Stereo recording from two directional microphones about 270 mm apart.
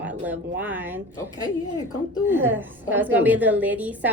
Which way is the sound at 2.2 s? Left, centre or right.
Centre.